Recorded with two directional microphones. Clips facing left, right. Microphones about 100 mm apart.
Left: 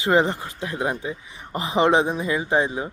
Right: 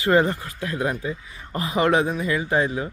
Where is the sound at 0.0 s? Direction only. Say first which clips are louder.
Even; 20° left (ahead or behind).